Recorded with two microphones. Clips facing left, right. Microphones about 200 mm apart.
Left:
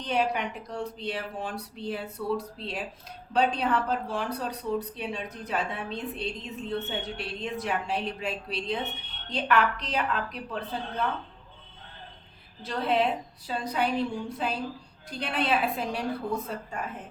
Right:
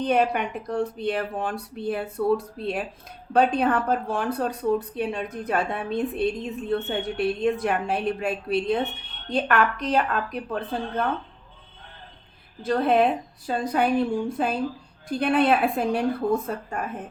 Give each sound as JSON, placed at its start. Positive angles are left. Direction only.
{"t": 0.0, "sound": "speech", "side_deg": -55}
{"t": 12.6, "sound": "speech", "side_deg": -50}